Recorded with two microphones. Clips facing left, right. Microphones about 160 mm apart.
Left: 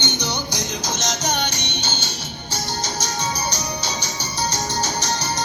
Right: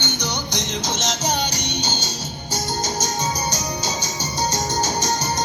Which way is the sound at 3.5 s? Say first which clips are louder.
Right 1 dB; 45° right (ahead or behind).